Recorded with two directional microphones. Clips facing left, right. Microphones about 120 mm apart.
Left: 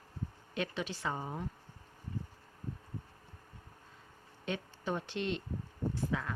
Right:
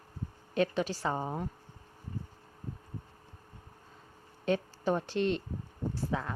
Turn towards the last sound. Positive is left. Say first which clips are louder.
# right 1 dB
turn(degrees=-30)  # may be behind; listen again after turning